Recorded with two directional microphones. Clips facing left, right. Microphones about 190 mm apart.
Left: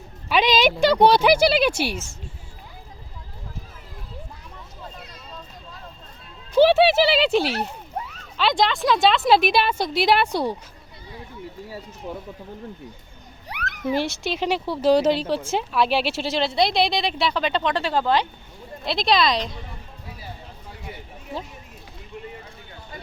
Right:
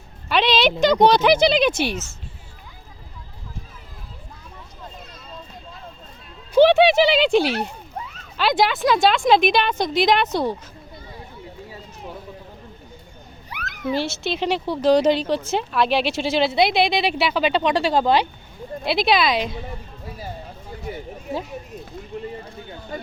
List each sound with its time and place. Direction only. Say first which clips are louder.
0.3 s speech: even; 10° left (ahead or behind)
6.6 s speech: right 2 dB; 5° left (ahead or behind)
13.9 s speech: right 1 dB; 15° left (ahead or behind); by 18.3 s 15° right (ahead or behind)
18.9 s speech: right 1 dB; 5° right (ahead or behind)
22.1 s a sound: right 6 dB; 40° right (ahead or behind)